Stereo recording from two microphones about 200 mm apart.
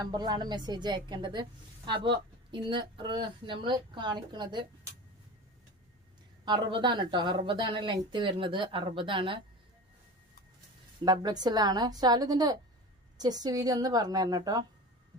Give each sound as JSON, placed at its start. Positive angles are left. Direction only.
{"t": 0.0, "sound": "a woman's voice", "side_deg": -20}
{"t": 6.4, "sound": "a woman's voice", "side_deg": -25}
{"t": 11.0, "sound": "a woman's voice", "side_deg": -20}